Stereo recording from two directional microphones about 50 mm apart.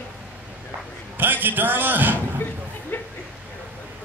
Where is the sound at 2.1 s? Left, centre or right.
Left.